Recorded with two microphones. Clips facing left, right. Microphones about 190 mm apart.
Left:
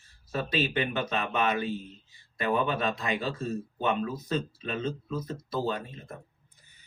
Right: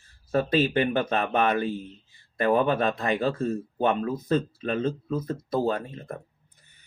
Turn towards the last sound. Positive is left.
turn(degrees=-50)  # may be behind; listen again after turning